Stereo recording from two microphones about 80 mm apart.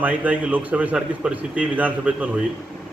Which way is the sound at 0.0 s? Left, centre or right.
Right.